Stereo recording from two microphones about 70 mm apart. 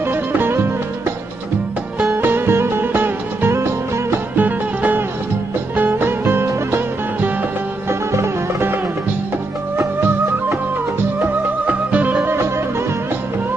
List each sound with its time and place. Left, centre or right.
0.0 s music: right
2.1 s music: right
4.4 s music: right
11.6 s music: right
12.2 s music: right